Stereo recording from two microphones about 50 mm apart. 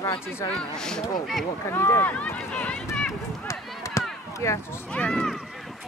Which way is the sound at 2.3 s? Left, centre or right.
Left.